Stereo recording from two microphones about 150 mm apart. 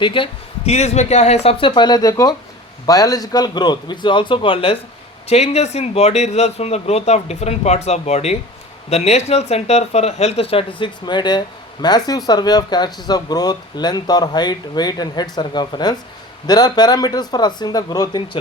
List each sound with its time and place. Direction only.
0.0 s speech: 35° left (ahead or behind)